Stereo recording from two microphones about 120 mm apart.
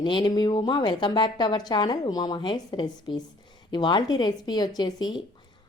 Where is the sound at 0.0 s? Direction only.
40° left (ahead or behind).